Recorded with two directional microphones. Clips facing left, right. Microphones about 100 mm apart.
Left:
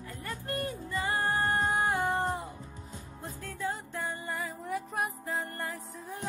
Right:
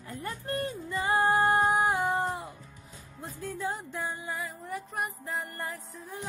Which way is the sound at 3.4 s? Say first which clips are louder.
Right 2 dB; 15° right (ahead or behind).